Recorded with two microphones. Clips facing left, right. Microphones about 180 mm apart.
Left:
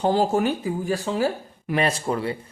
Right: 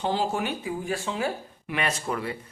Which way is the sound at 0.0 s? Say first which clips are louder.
Left 7 dB; 40° left (ahead or behind).